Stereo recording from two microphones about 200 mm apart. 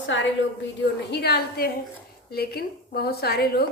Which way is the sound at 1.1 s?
55° left (ahead or behind).